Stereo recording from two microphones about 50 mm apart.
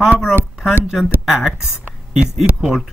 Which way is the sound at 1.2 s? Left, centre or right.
Centre.